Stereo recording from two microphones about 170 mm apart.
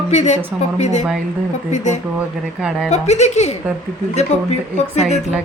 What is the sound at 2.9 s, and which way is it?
Speech, 40° left (ahead or behind).